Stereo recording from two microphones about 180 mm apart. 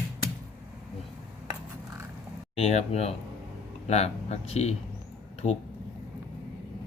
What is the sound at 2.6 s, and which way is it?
Speech, 35° left (ahead or behind).